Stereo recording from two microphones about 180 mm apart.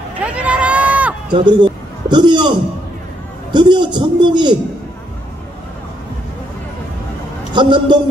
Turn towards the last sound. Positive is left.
turn(degrees=-25)  # may be behind; listen again after turning